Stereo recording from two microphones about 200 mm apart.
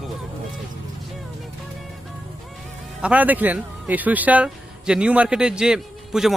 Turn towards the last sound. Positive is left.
turn(degrees=-5)  # may be behind; listen again after turning